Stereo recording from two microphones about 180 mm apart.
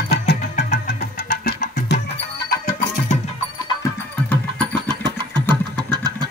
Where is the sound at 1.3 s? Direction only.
55° left (ahead or behind).